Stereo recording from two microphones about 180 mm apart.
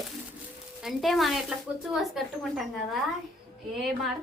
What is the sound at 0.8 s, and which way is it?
Speech, centre (ahead or behind).